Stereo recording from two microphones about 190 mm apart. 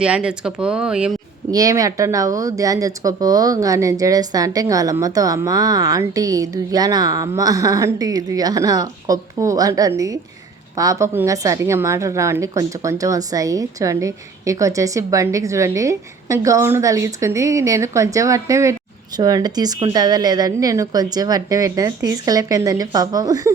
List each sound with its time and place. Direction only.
0.0 s speech: 5° right (ahead or behind)
1.5 s a woman's voice: 20° right (ahead or behind)